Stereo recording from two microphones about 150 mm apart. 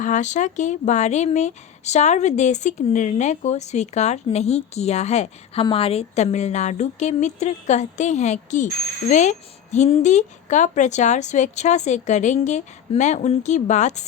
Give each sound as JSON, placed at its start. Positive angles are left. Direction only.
{"t": 0.0, "sound": "speech", "side_deg": 55}